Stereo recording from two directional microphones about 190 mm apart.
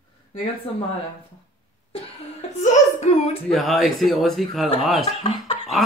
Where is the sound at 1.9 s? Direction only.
35° left (ahead or behind).